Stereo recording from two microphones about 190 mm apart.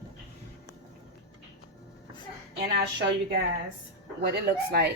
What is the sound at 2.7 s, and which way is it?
Speech, 60° right (ahead or behind).